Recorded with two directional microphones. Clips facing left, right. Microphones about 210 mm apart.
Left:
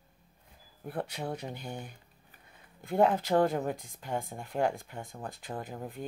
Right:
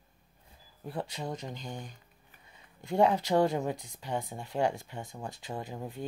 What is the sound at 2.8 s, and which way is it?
Speech, 50° left (ahead or behind).